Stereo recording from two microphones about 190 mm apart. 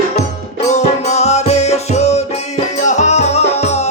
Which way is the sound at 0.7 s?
35° left (ahead or behind).